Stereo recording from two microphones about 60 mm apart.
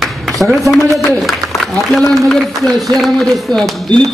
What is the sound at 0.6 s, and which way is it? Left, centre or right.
Speech, left.